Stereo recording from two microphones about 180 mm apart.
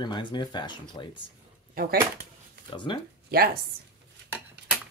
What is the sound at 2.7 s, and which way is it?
Speech, 25° left (ahead or behind).